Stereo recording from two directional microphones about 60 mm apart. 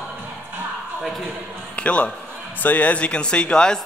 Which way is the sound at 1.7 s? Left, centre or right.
Left.